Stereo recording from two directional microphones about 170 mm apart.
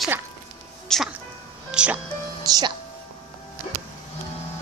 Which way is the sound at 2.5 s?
25° right (ahead or behind).